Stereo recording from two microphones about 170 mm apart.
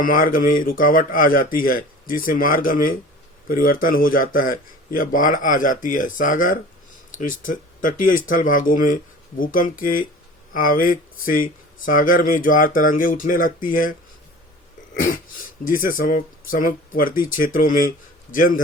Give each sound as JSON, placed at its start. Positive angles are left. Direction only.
{"t": 0.0, "sound": "speech", "side_deg": 55}
{"t": 14.9, "sound": "a sound", "side_deg": 55}
{"t": 15.6, "sound": "speech", "side_deg": 55}